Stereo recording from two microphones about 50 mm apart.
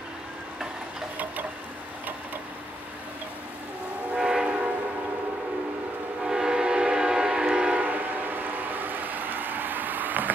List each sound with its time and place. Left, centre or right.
4.2 s train: centre
6.2 s train: centre
7.8 s train: right